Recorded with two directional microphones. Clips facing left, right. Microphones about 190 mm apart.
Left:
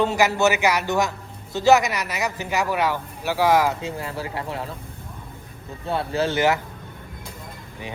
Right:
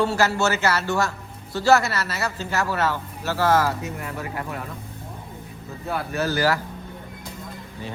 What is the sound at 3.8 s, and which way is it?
Speech, 30° left (ahead or behind).